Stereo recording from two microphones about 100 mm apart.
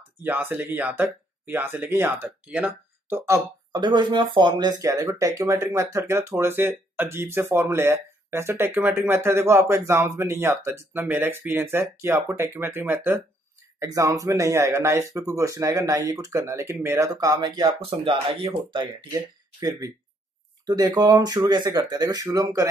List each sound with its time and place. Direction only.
0.2 s speech: 20° right (ahead or behind)
3.7 s speech: 50° right (ahead or behind); by 13.2 s 20° right (ahead or behind)
13.7 s speech: 35° right (ahead or behind)
17.1 s speech: 40° right (ahead or behind)
17.7 s speech: 65° right (ahead or behind)
19.1 s speech: 35° right (ahead or behind)